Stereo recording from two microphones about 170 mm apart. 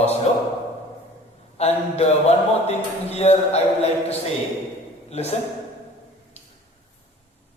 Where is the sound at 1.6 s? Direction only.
40° left (ahead or behind).